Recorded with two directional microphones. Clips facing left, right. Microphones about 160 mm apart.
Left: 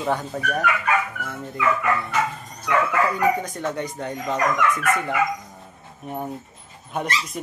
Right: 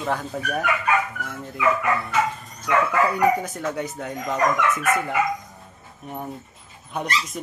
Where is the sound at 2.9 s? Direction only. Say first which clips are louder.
Right 1 dB; 10° right (ahead or behind).